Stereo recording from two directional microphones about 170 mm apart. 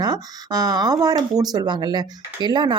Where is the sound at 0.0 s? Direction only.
25° right (ahead or behind).